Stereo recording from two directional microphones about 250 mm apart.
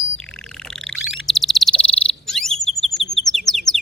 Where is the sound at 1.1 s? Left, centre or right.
Centre.